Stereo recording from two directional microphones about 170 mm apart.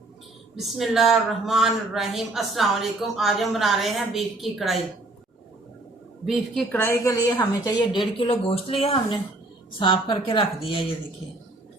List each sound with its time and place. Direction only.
0.6 s a man's voice: centre (ahead or behind)
6.2 s a man's voice: centre (ahead or behind)
6.7 s a woman's voice: 15° left (ahead or behind); by 10.9 s 30° left (ahead or behind)